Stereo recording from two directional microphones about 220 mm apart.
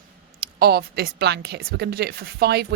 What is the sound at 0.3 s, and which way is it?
Speech, 45° right (ahead or behind).